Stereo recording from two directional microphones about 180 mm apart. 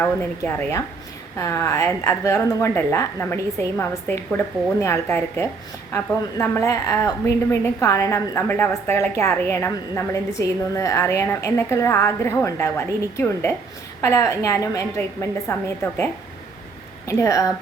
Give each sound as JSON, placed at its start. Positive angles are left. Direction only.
{"t": 0.0, "sound": "a woman's voice", "side_deg": 10}
{"t": 17.1, "sound": "a woman's voice", "side_deg": 15}